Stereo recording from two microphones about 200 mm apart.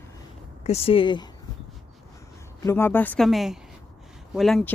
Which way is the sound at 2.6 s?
10° left (ahead or behind).